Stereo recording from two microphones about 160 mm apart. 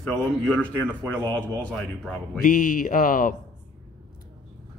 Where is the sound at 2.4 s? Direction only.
60° left (ahead or behind).